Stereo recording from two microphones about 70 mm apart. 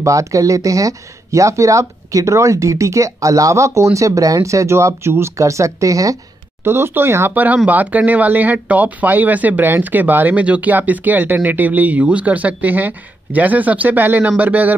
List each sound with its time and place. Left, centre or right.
0.0 s speech: right
6.6 s speech: right
7.3 s speech: right